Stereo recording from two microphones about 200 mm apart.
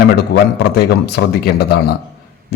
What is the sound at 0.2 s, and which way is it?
A man's voice, 50° left (ahead or behind).